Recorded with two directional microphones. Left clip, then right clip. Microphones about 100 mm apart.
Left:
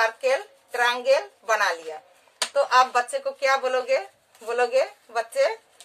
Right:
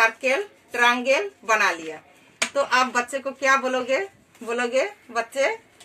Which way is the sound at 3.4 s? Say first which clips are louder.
Right 2 dB; centre (ahead or behind).